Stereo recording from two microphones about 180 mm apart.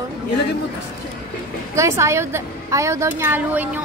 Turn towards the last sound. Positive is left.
turn(degrees=-10)  # may be behind; listen again after turning